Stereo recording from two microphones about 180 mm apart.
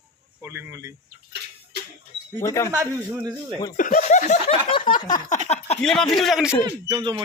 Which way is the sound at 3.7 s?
50° left (ahead or behind).